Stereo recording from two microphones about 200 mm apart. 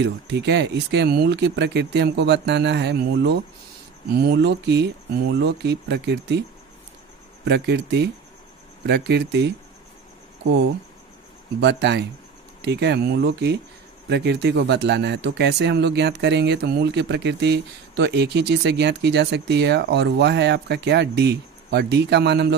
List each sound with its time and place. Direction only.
0.0 s speech: 60° right (ahead or behind)
7.4 s speech: 55° right (ahead or behind)
11.6 s speech: 60° right (ahead or behind)